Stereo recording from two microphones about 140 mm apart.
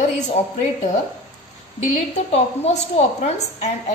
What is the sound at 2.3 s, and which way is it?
A woman's voice, 50° left (ahead or behind).